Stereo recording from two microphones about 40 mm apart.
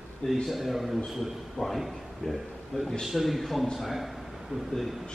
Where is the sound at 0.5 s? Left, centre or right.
Centre.